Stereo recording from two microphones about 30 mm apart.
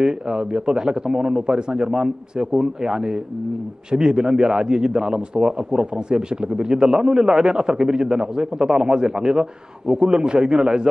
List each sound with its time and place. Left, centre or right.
0.0 s a man's voice: right